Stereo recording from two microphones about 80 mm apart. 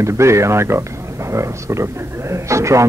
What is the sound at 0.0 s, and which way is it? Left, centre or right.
Speech, right.